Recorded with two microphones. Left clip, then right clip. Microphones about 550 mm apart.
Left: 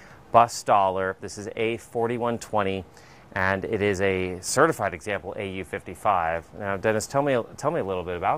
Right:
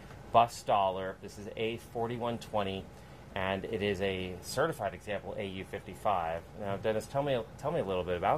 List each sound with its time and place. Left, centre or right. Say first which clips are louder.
0.3 s speech: left 8 dB; left